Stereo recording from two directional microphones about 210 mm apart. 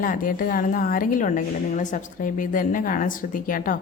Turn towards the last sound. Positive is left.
turn(degrees=40)  # may be behind; listen again after turning